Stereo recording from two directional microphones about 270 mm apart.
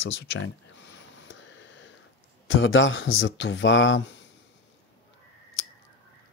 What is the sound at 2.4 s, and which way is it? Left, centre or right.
Speech, left.